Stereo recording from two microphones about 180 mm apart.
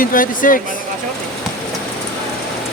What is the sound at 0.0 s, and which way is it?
Speech, 50° left (ahead or behind).